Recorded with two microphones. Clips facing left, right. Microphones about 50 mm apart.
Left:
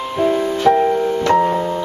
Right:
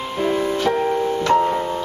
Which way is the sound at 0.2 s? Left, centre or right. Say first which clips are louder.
Left 4 dB; centre.